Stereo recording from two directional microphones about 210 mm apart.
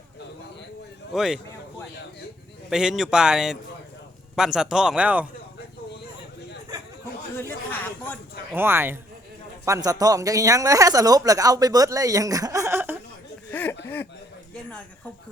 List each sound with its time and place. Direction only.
1.1 s speech: centre (ahead or behind)
2.6 s speech: centre (ahead or behind)
7.3 s a sound: 10° left (ahead or behind)
8.5 s speech: 10° right (ahead or behind)
13.5 s a sound: 10° left (ahead or behind)
13.8 s chuckle: 10° left (ahead or behind)